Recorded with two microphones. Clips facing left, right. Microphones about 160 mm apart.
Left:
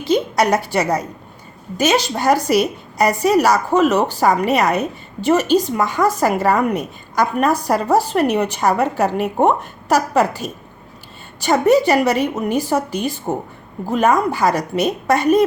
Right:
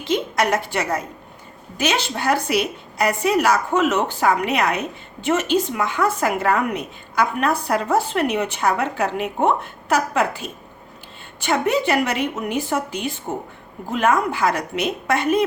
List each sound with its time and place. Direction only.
0.0 s a woman's voice: 35° left (ahead or behind)